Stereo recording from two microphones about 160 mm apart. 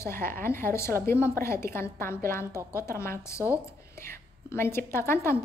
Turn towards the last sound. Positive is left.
turn(degrees=15)  # may be behind; listen again after turning